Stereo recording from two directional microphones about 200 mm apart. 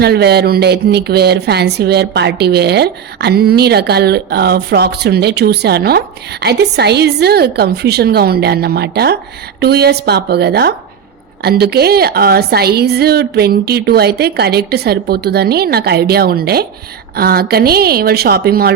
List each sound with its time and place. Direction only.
0.0 s a woman's voice: 55° right (ahead or behind)